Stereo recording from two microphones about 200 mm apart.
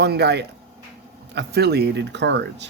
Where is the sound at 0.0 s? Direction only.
55° right (ahead or behind).